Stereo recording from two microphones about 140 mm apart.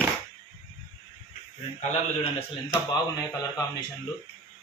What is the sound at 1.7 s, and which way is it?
Speech, 45° left (ahead or behind).